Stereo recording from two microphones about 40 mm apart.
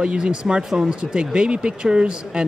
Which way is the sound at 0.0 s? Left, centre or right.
Right.